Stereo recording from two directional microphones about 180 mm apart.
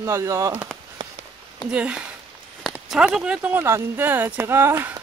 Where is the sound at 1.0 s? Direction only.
25° right (ahead or behind).